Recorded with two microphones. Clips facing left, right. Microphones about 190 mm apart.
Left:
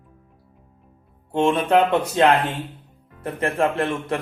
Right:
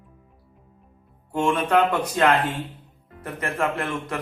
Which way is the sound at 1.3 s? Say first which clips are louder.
Left 3 dB; 25° left (ahead or behind).